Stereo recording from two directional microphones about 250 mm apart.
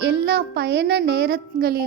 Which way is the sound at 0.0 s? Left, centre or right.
Right.